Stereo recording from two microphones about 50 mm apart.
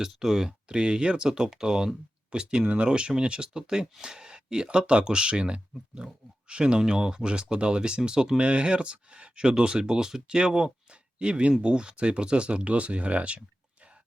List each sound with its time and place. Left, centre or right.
0.0 s speech: centre
0.8 s speech: centre